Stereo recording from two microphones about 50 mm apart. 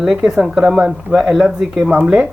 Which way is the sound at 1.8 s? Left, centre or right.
Right.